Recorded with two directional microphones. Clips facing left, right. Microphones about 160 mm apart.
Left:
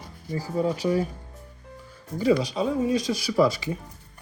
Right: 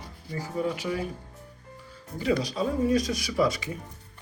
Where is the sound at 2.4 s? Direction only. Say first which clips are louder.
Left 2 dB; 25° left (ahead or behind).